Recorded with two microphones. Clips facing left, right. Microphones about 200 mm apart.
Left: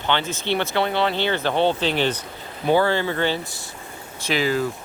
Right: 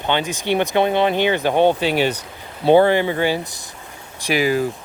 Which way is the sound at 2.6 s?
20° right (ahead or behind).